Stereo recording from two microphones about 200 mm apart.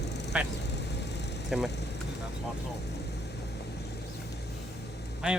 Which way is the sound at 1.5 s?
Centre (ahead or behind).